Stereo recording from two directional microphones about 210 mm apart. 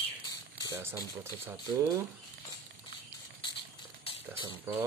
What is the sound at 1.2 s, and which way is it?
Speech, 15° right (ahead or behind).